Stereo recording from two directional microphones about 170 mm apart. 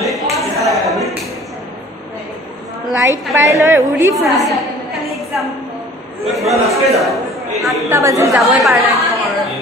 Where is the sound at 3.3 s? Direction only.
15° right (ahead or behind).